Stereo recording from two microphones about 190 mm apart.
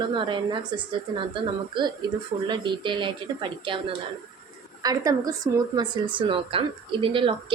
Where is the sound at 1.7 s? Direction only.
25° right (ahead or behind).